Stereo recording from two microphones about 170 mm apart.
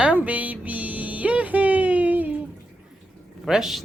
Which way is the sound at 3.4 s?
Centre (ahead or behind).